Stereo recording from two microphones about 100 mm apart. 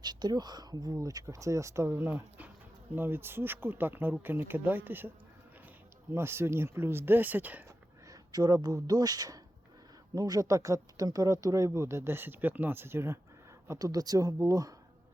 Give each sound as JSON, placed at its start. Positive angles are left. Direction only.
{"t": 0.0, "sound": "speech", "side_deg": -45}
{"t": 6.1, "sound": "speech", "side_deg": -25}
{"t": 8.0, "sound": "speech", "side_deg": -40}
{"t": 13.7, "sound": "speech", "side_deg": -35}